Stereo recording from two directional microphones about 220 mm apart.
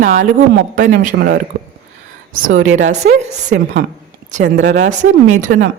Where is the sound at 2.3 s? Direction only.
35° right (ahead or behind).